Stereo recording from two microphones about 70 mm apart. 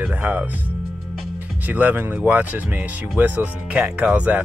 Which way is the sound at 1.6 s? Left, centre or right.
Right.